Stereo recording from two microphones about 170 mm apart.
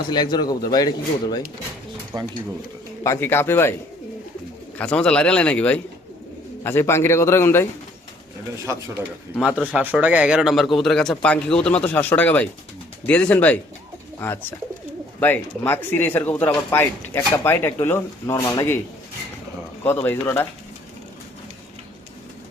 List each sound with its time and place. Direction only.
0.1 s speech: 25° left (ahead or behind)
2.1 s speech: 25° right (ahead or behind)
3.0 s speech: 15° left (ahead or behind)
4.8 s speech: 5° left (ahead or behind)
8.6 s a man's voice: 15° right (ahead or behind); by 18.8 s 15° left (ahead or behind)
19.8 s speech: 15° left (ahead or behind)